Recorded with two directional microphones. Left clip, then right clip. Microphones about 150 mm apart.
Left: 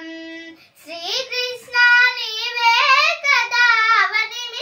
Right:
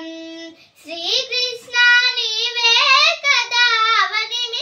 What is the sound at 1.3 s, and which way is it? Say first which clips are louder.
Child singing: right 2 dB; 35° right (ahead or behind).